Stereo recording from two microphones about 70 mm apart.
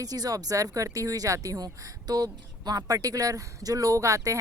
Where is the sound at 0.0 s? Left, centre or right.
Right.